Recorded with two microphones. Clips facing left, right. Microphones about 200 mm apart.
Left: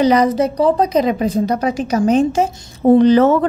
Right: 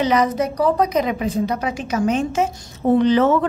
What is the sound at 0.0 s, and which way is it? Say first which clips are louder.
A woman's voice: left 5 dB; 35° left (ahead or behind).